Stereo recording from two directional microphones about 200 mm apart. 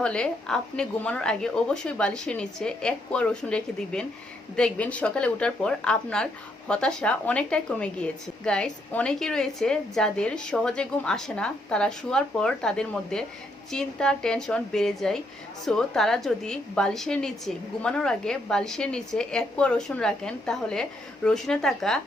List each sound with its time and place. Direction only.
0.0 s a woman's voice: 5° left (ahead or behind)